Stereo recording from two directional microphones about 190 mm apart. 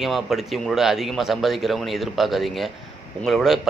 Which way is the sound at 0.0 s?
Centre (ahead or behind).